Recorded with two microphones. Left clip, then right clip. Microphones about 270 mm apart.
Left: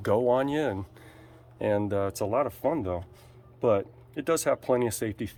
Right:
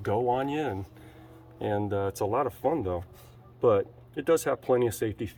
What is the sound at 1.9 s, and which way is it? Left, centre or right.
Speech, centre.